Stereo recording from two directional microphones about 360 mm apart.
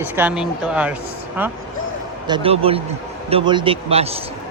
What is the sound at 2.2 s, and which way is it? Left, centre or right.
A man's voice, centre.